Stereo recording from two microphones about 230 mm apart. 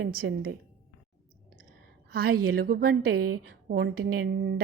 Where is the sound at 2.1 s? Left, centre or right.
Right.